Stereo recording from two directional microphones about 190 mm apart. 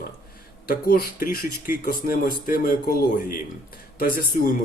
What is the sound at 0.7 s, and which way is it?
Speech, 50° left (ahead or behind).